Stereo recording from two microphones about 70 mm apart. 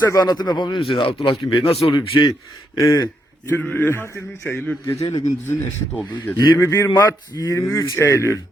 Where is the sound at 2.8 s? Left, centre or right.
Left.